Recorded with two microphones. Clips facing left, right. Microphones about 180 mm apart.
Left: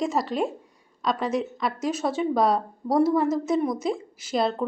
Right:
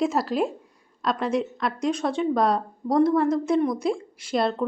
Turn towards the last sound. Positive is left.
turn(degrees=5)  # may be behind; listen again after turning